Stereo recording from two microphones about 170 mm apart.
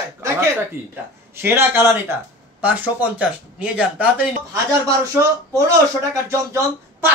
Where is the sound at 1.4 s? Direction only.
15° right (ahead or behind).